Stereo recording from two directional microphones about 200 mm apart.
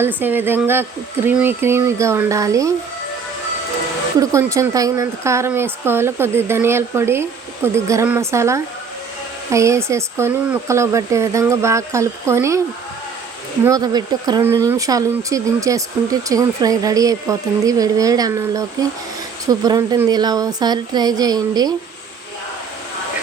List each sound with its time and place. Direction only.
0.0 s a woman's voice: 10° right (ahead or behind)
4.2 s a woman's voice: 15° right (ahead or behind)
13.7 s a woman's voice: 20° right (ahead or behind)